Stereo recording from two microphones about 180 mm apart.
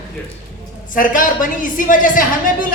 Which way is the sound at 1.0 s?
50° left (ahead or behind).